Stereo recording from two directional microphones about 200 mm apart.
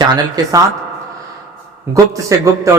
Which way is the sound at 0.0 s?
20° right (ahead or behind).